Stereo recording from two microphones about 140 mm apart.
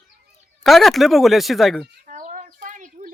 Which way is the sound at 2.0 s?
65° right (ahead or behind).